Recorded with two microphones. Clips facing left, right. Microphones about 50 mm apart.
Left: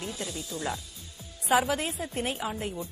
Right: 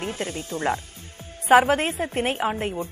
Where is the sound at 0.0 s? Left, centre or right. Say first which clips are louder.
Right 6 dB; right.